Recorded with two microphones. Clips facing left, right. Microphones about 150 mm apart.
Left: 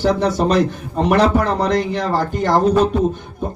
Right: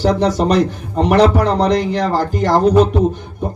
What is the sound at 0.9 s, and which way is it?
A man's voice, 15° right (ahead or behind).